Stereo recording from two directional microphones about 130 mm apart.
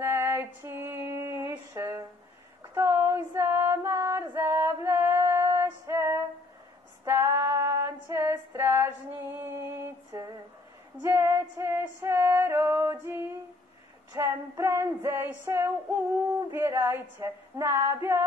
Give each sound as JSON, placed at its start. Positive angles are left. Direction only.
{"t": 0.0, "sound": "female singing", "side_deg": -20}
{"t": 14.1, "sound": "female singing", "side_deg": -20}